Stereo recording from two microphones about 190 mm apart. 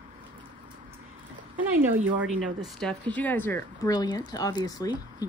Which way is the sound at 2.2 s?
5° right (ahead or behind).